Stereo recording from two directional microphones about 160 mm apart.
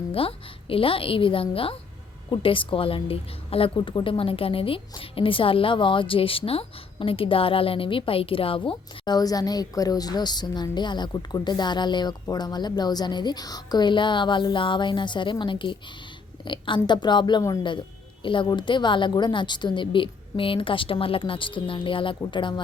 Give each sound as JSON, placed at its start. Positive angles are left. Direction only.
{"t": 0.1, "sound": "a woman's voice", "side_deg": 35}